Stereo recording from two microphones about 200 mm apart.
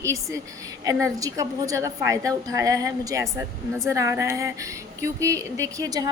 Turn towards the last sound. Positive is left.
turn(degrees=-20)  # may be behind; listen again after turning